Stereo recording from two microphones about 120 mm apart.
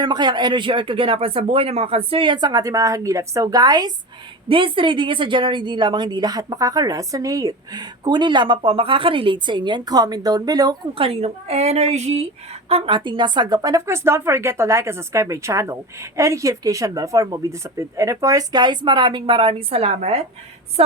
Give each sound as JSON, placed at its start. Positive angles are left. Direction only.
{"t": 0.0, "sound": "a woman's voice", "side_deg": -35}
{"t": 4.4, "sound": "a woman's voice", "side_deg": -45}
{"t": 10.9, "sound": "a woman's voice", "side_deg": -50}
{"t": 13.1, "sound": "speech", "side_deg": -40}